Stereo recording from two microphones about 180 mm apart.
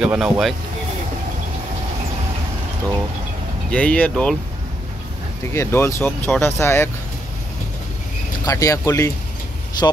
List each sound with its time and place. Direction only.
0.0 s speech: 5° right (ahead or behind)
3.7 s speech: 5° left (ahead or behind)
5.5 s speech: 15° left (ahead or behind)
8.5 s speech: 20° left (ahead or behind)